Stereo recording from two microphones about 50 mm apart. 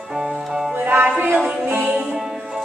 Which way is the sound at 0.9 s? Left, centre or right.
Right.